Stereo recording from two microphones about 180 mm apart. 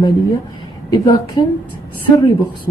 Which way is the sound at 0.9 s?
20° left (ahead or behind).